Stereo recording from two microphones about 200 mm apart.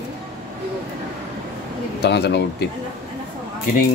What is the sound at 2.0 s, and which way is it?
Speech, 55° left (ahead or behind).